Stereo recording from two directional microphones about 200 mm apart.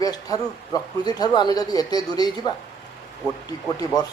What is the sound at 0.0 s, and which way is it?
Speech, 20° left (ahead or behind).